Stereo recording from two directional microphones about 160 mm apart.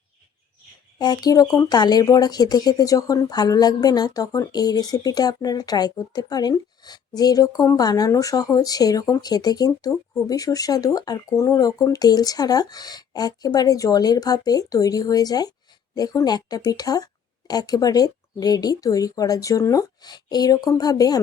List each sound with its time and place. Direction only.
0.9 s speech: 25° left (ahead or behind)